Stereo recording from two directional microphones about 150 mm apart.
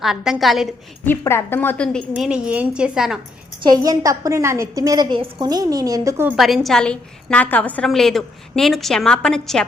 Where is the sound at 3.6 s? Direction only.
25° right (ahead or behind).